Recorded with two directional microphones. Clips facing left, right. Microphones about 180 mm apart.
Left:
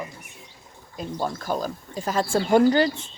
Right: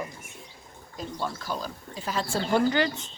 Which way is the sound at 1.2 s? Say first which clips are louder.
Left 6 dB; 50° left (ahead or behind).